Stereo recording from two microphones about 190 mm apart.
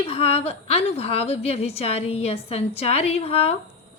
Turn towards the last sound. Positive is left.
turn(degrees=30)  # may be behind; listen again after turning